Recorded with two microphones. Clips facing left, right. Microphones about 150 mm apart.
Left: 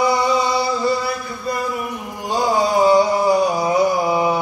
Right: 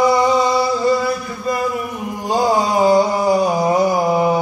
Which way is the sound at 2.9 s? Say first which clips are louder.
Right 1 dB; 40° right (ahead or behind).